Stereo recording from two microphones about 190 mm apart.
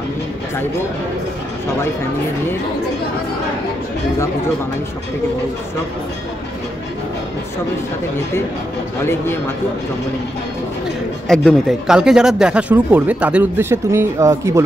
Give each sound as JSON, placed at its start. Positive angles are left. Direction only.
{"t": 11.2, "sound": "speech", "side_deg": 5}